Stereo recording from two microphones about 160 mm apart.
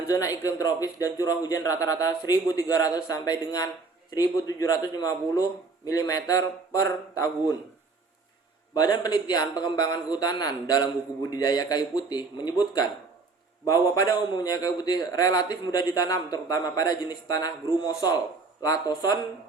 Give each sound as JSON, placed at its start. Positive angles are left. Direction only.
{"t": 0.1, "sound": "speech", "side_deg": 20}
{"t": 8.7, "sound": "speech", "side_deg": 25}
{"t": 14.3, "sound": "speech", "side_deg": 25}